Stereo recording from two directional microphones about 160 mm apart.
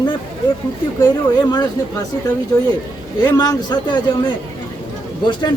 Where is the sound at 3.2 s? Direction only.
25° left (ahead or behind).